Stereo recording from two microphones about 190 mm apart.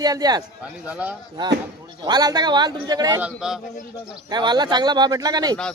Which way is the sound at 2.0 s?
20° right (ahead or behind).